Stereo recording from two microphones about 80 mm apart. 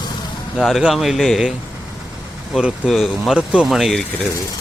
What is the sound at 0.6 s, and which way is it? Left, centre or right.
Speech, centre.